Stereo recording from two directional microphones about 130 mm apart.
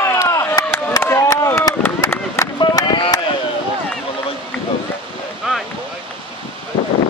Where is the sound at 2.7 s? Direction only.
35° left (ahead or behind).